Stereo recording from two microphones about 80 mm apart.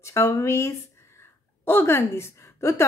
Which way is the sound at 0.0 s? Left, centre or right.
Left.